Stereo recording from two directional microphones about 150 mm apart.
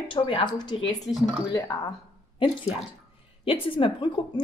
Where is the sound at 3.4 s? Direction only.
35° left (ahead or behind).